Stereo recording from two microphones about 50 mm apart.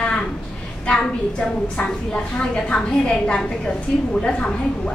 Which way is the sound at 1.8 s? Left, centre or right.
Centre.